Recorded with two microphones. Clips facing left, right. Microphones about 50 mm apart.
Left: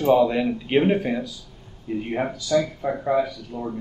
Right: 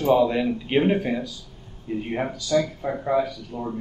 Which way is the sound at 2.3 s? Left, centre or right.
Left.